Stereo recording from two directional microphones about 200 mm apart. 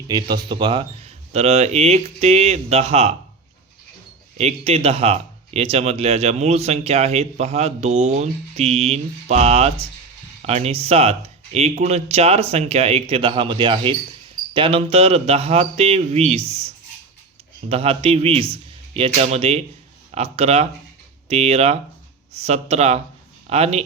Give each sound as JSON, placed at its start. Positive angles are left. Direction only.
{"t": 0.1, "sound": "speech", "side_deg": -20}
{"t": 4.4, "sound": "a man's voice", "side_deg": -30}